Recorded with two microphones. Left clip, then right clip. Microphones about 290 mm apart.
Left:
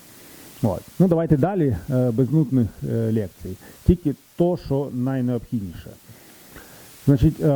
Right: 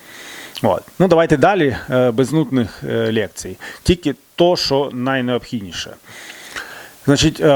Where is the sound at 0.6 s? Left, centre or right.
Centre.